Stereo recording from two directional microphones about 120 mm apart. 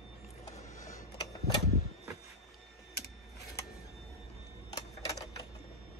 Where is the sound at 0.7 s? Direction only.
90° left.